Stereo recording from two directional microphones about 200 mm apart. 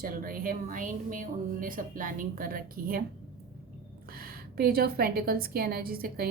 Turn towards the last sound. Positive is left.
turn(degrees=-50)  # may be behind; listen again after turning